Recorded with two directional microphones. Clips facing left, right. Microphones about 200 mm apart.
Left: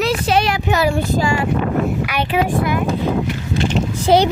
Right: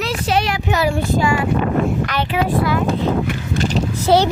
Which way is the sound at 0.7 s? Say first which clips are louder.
Left 1 dB; 40° left (ahead or behind).